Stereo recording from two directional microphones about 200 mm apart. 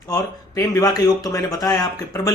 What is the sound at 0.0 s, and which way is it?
Speech, 15° left (ahead or behind).